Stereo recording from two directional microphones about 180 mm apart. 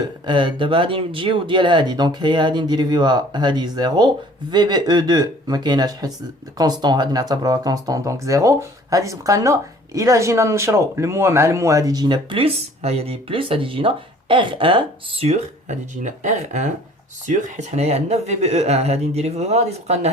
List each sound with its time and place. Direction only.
0.3 s speech: 25° right (ahead or behind)